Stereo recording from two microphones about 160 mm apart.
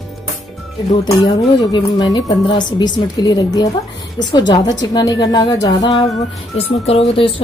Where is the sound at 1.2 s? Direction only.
25° left (ahead or behind).